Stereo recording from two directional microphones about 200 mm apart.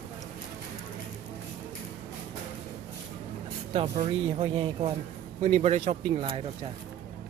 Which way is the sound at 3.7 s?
30° right (ahead or behind).